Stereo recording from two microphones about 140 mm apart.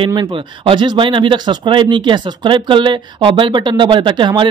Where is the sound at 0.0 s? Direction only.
35° right (ahead or behind).